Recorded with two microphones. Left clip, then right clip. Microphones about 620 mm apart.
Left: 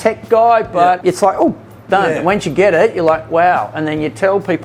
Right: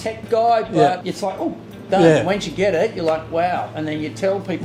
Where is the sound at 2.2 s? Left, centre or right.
Left.